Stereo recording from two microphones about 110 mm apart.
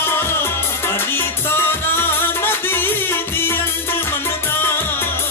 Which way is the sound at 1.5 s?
20° left (ahead or behind).